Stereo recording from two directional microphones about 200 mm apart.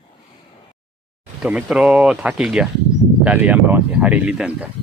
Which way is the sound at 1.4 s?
5° right (ahead or behind).